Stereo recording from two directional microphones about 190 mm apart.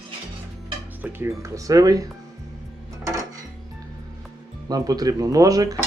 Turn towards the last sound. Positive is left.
turn(degrees=-20)  # may be behind; listen again after turning